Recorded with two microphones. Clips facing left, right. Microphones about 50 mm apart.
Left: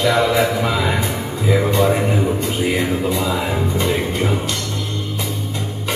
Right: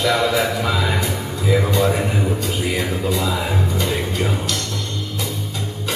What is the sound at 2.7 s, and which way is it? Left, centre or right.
Speech, left.